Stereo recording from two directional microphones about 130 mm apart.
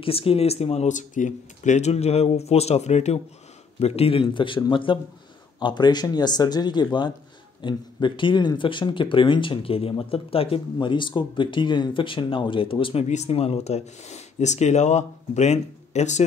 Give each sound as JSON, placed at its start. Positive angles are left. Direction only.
{"t": 0.0, "sound": "speech", "side_deg": 45}
{"t": 13.1, "sound": "speech", "side_deg": 55}